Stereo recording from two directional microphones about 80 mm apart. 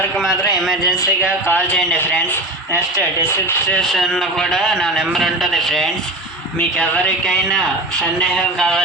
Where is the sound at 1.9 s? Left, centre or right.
Left.